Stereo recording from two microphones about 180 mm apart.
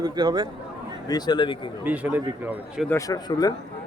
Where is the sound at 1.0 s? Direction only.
20° left (ahead or behind).